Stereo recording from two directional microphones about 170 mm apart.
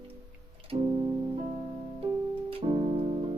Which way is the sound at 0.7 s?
35° right (ahead or behind).